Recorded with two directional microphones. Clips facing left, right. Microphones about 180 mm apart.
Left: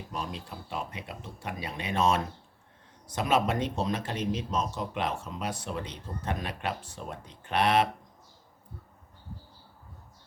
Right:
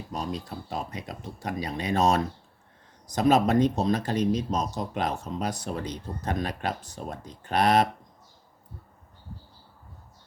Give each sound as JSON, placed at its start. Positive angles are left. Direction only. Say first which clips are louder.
{"t": 0.1, "sound": "speech", "louder": "right 5 dB", "side_deg": -40}